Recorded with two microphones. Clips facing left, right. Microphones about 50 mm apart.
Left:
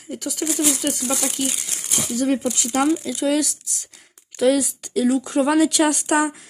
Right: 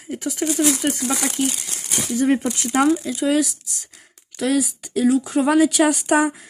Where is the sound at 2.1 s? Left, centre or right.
Right.